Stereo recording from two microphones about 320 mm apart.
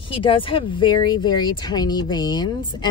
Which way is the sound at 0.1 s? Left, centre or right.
Centre.